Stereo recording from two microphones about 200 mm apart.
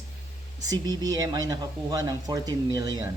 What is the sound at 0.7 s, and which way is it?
Speech, 20° right (ahead or behind).